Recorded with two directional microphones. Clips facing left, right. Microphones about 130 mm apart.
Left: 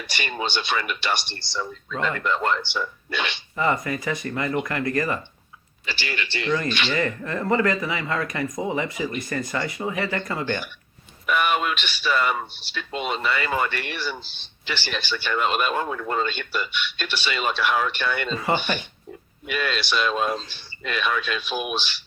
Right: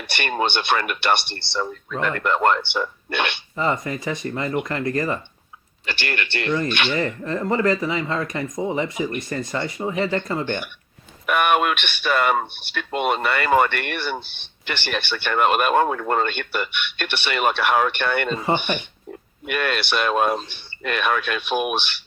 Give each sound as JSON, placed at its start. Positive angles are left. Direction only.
{"t": 0.1, "sound": "speech", "side_deg": -55}
{"t": 3.6, "sound": "speech", "side_deg": -25}
{"t": 5.8, "sound": "speech", "side_deg": -60}
{"t": 6.9, "sound": "speech", "side_deg": -25}
{"t": 11.3, "sound": "speech", "side_deg": -60}
{"t": 18.3, "sound": "speech", "side_deg": -25}
{"t": 19.5, "sound": "speech", "side_deg": -55}